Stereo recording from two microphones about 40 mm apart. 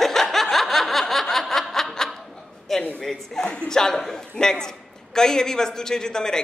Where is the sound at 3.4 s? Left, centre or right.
Left.